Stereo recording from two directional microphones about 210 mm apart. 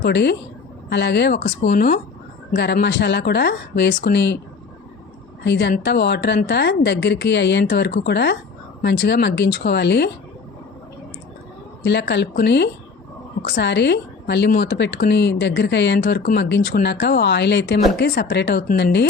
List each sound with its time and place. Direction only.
0.0 s a woman's voice: 50° left (ahead or behind)
1.6 s speech: 35° left (ahead or behind)
2.5 s a woman's voice: 50° left (ahead or behind)
5.4 s a woman's voice: 55° left (ahead or behind)
11.8 s a woman's voice: 55° left (ahead or behind)